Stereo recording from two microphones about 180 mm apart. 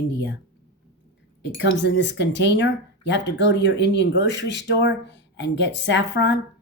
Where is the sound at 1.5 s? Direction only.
90° left.